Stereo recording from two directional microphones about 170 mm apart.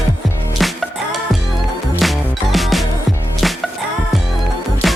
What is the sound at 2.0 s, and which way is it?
Music, centre (ahead or behind).